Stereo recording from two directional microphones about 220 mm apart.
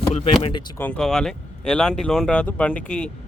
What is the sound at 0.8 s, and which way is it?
Speech, 5° left (ahead or behind).